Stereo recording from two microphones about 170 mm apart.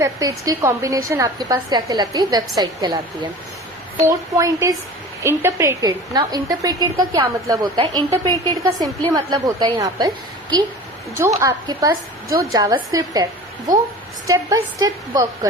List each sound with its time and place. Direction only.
0.0 s a woman's voice: 20° right (ahead or behind)
14.3 s a woman's voice: 20° right (ahead or behind)